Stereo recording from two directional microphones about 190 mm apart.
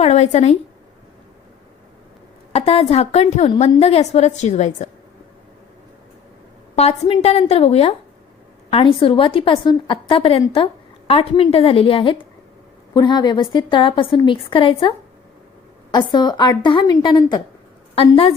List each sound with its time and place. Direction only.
0.0 s a woman's voice: 35° left (ahead or behind)
2.5 s a woman's voice: 30° left (ahead or behind)
6.7 s a woman's voice: 35° left (ahead or behind)